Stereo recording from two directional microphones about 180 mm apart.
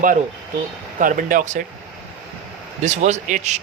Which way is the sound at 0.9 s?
45° right (ahead or behind).